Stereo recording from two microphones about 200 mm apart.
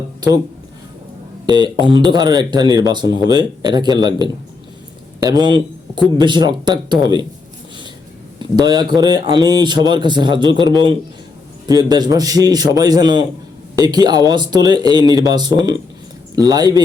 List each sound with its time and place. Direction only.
1.5 s a man's voice: 20° right (ahead or behind)
8.4 s a man's voice: 20° right (ahead or behind)